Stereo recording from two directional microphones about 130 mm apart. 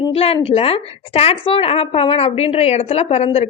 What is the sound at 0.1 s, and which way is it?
A woman's voice, 50° left (ahead or behind).